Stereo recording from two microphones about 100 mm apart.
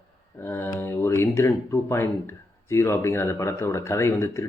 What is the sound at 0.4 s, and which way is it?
Speech, 20° left (ahead or behind).